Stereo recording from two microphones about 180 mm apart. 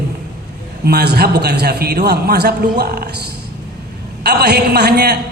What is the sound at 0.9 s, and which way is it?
A man's voice, 60° right (ahead or behind).